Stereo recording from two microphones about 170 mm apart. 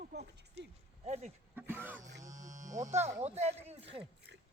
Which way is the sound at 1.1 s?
40° right (ahead or behind).